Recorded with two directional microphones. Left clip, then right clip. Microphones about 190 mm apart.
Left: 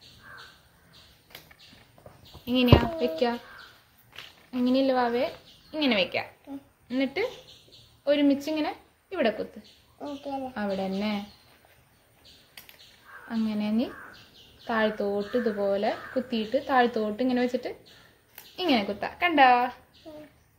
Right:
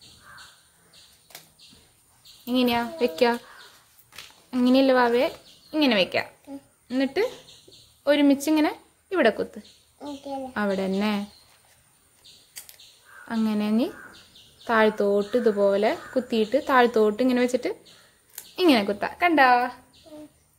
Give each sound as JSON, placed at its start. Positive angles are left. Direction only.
{"t": 2.4, "sound": "a child's voice", "side_deg": -30}
{"t": 3.0, "sound": "speech", "side_deg": -50}
{"t": 4.5, "sound": "a woman's voice", "side_deg": -50}
{"t": 8.0, "sound": "a woman's voice", "side_deg": -50}
{"t": 9.9, "sound": "a child's voice", "side_deg": 10}
{"t": 10.5, "sound": "speech", "side_deg": -45}
{"t": 13.3, "sound": "a woman's voice", "side_deg": -45}